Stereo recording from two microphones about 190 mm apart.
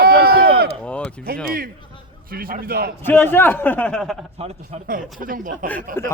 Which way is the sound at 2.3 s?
50° right (ahead or behind).